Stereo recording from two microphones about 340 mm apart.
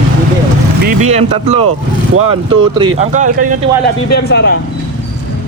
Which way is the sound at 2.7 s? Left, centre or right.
Centre.